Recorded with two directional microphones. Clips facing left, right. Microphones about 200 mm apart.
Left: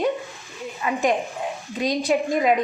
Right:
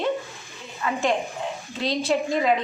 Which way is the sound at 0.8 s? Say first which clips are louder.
Left 2 dB; 15° left (ahead or behind).